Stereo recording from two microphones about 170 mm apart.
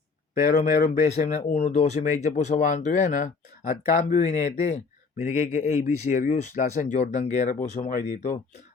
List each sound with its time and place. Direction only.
0.4 s speech: 45° left (ahead or behind)